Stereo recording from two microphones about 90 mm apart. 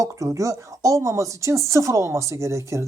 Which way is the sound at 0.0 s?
40° right (ahead or behind).